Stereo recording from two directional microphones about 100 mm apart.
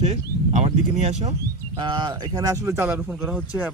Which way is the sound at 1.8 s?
50° right (ahead or behind).